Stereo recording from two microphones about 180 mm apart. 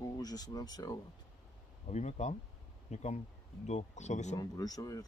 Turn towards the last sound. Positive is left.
turn(degrees=20)  # may be behind; listen again after turning